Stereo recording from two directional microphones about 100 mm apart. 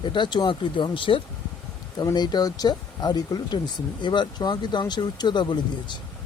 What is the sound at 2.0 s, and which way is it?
Speech, 45° left (ahead or behind).